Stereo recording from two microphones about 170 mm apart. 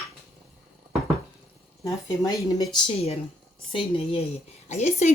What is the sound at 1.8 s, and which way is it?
A woman's voice, 20° left (ahead or behind).